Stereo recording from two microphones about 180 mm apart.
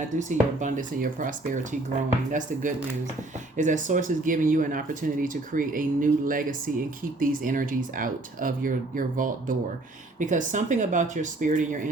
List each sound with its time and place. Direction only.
0.2 s speech: 45° right (ahead or behind)